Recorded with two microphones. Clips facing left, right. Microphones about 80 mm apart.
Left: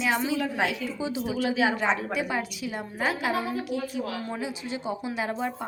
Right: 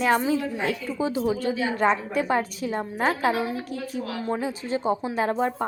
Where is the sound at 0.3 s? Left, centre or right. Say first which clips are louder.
Right 1 dB; left.